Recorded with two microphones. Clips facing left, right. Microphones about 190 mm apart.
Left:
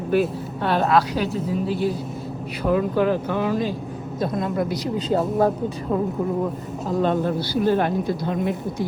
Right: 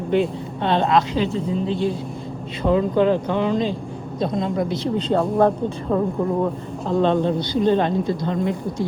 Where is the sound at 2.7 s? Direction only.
25° right (ahead or behind).